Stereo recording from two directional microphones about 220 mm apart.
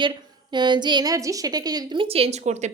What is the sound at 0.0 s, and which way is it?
A woman's voice, 20° right (ahead or behind).